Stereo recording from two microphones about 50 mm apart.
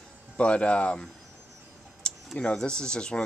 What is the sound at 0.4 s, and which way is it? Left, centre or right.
Speech, left.